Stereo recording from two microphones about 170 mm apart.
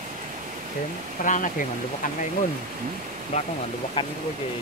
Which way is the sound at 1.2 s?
50° left (ahead or behind).